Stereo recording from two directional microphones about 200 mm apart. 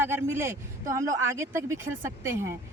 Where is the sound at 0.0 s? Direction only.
10° right (ahead or behind).